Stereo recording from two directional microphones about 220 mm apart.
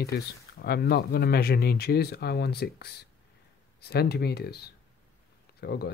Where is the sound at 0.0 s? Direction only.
45° left (ahead or behind).